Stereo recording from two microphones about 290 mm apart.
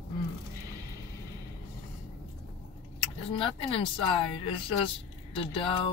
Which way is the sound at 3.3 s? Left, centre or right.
Centre.